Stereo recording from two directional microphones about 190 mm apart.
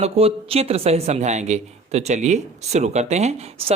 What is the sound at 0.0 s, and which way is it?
Speech, 30° right (ahead or behind).